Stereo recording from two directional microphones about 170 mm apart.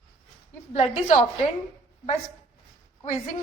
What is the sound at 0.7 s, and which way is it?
Speech, 40° left (ahead or behind).